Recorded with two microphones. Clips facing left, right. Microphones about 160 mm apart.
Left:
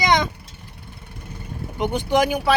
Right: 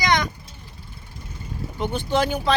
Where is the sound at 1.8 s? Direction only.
15° left (ahead or behind).